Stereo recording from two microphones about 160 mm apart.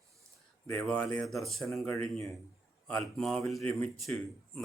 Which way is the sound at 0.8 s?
5° left (ahead or behind).